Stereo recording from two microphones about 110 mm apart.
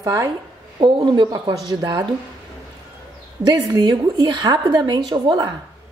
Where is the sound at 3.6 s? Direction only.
40° right (ahead or behind).